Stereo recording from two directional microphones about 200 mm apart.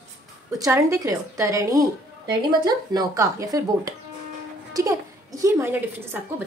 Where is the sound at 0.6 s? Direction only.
15° right (ahead or behind).